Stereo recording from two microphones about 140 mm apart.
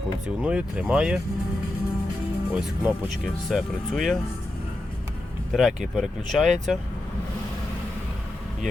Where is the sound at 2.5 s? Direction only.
5° right (ahead or behind).